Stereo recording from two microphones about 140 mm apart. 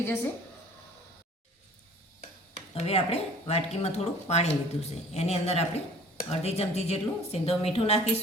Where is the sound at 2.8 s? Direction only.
45° left (ahead or behind).